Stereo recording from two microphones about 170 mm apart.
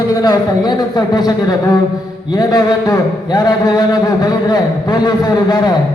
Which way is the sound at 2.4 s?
25° left (ahead or behind).